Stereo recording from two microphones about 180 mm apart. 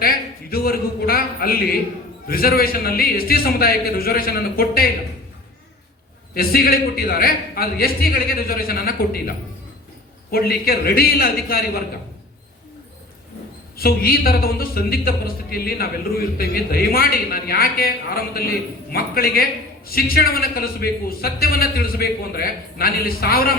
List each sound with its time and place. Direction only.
0.0 s a man's voice: 55° left (ahead or behind)
6.3 s speech: 55° left (ahead or behind)
10.3 s speech: 60° left (ahead or behind)
13.7 s speech: 55° left (ahead or behind)